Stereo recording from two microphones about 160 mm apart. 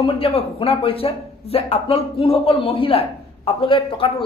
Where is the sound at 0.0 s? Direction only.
35° left (ahead or behind).